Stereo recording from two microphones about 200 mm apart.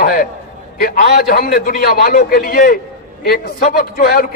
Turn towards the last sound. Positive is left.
turn(degrees=50)  # may be behind; listen again after turning